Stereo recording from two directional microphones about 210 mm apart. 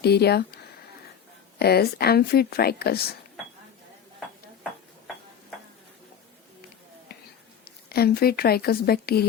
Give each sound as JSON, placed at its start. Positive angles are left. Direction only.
{"t": 0.0, "sound": "speech", "side_deg": 50}
{"t": 7.6, "sound": "speech", "side_deg": 45}